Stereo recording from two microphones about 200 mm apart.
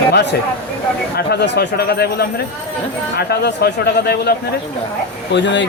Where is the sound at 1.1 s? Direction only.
55° left (ahead or behind).